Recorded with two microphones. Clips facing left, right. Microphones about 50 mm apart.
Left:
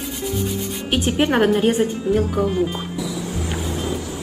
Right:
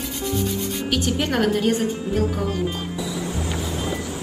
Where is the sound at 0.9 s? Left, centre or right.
Left.